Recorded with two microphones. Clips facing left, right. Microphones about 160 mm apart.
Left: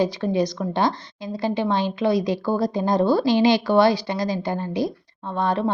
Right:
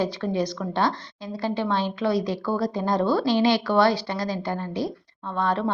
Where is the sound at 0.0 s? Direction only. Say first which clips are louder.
Left 4 dB; 15° left (ahead or behind).